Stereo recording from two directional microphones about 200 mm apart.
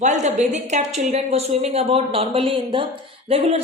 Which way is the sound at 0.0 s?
35° right (ahead or behind).